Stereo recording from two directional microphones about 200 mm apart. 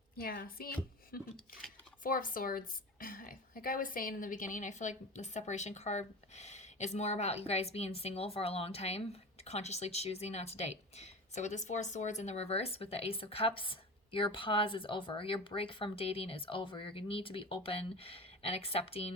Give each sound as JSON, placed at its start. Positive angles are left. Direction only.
{"t": 0.2, "sound": "a woman's voice", "side_deg": 45}